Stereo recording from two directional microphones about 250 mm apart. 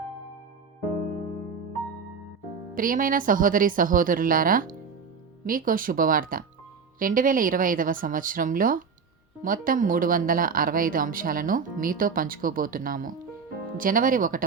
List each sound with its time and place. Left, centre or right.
2.7 s speech: right